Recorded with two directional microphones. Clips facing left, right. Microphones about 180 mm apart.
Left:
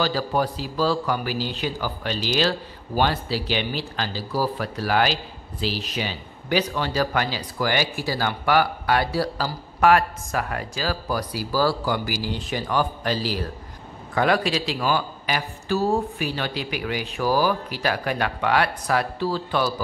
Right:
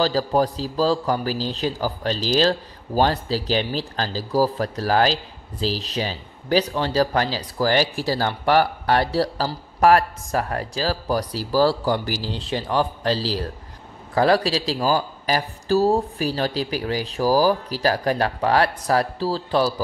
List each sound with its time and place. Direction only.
0.0 s a man's voice: 35° right (ahead or behind)